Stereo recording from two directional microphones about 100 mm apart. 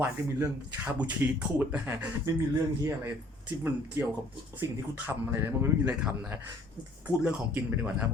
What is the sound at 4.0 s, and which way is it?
Speech, 25° right (ahead or behind).